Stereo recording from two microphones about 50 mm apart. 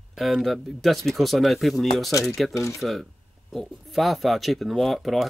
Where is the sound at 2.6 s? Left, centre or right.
Left.